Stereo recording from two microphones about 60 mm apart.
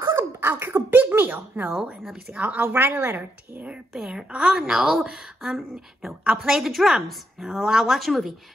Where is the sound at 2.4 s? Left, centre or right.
Right.